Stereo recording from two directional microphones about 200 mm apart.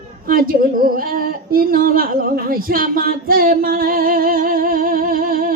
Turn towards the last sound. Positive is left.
turn(degrees=-45)  # may be behind; listen again after turning